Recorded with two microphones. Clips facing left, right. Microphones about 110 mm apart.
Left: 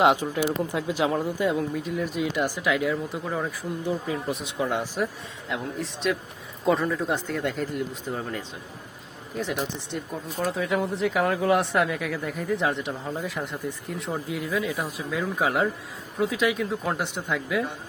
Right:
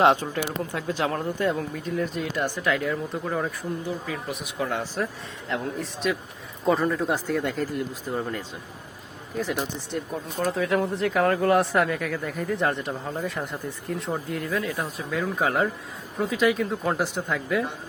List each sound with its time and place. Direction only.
0.0 s speech: 10° left (ahead or behind)
3.8 s speech: 25° left (ahead or behind)
4.6 s speech: 15° left (ahead or behind)
5.5 s speech: centre (ahead or behind)